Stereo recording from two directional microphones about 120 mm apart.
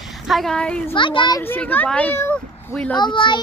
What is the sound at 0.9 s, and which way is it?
Speech, 45° left (ahead or behind).